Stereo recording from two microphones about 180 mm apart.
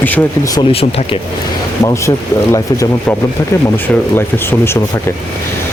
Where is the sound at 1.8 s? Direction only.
15° left (ahead or behind).